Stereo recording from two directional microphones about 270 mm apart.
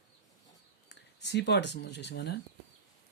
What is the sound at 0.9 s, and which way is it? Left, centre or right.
Speech, left.